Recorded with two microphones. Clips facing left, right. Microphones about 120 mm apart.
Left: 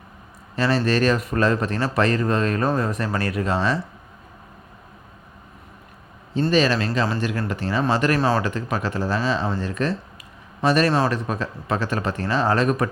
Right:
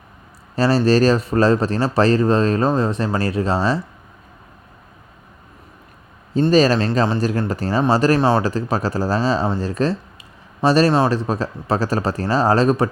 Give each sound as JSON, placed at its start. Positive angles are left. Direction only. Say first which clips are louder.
{"t": 0.5, "sound": "speech", "louder": "right 5 dB", "side_deg": -35}
{"t": 6.5, "sound": "speech", "louder": "right 5 dB", "side_deg": -40}
{"t": 8.2, "sound": "speech", "louder": "right 4 dB", "side_deg": -25}
{"t": 8.4, "sound": "speech", "louder": "right 4 dB", "side_deg": -35}